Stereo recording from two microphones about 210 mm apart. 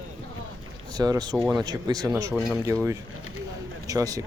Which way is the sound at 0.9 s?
15° right (ahead or behind).